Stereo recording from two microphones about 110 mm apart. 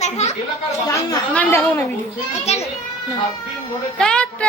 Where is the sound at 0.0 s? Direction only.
90° left.